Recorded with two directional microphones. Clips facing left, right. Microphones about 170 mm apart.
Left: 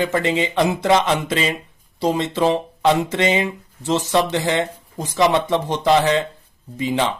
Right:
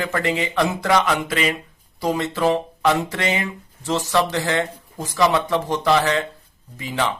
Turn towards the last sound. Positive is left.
turn(degrees=20)  # may be behind; listen again after turning